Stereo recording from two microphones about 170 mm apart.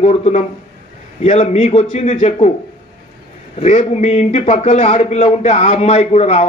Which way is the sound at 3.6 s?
40° left (ahead or behind).